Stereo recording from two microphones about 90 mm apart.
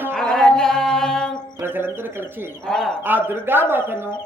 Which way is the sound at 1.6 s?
25° right (ahead or behind).